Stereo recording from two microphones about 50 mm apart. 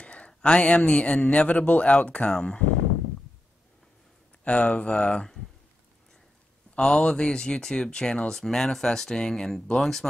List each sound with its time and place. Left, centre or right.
0.0 s a sound: left
0.3 s a man's voice: left
4.5 s a man's voice: left
6.8 s speech: centre